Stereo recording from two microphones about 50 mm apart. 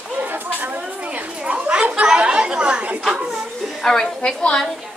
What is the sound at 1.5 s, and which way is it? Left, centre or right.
Chatter, right.